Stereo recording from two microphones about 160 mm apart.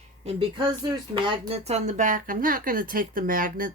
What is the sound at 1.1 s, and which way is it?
Speech, 30° right (ahead or behind).